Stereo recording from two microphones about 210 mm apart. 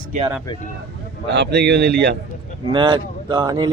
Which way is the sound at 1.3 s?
55° right (ahead or behind).